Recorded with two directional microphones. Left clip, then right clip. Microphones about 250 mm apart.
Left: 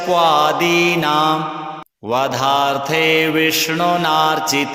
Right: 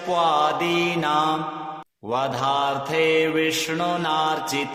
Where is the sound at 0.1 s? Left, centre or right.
Left.